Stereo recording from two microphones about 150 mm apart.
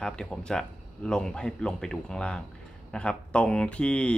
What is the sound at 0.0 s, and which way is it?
Speech, 5° left (ahead or behind).